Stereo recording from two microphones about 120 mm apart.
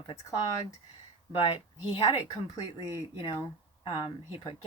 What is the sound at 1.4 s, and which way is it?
Speech, 50° left (ahead or behind).